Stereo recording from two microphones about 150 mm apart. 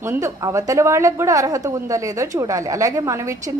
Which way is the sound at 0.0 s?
20° right (ahead or behind).